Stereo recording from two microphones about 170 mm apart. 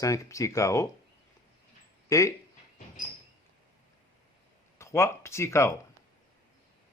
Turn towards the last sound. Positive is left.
turn(degrees=15)  # may be behind; listen again after turning